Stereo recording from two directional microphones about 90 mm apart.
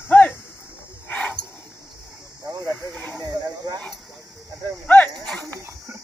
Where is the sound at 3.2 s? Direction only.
45° right (ahead or behind).